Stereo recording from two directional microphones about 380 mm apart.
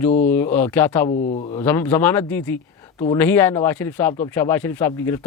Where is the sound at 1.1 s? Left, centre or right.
Centre.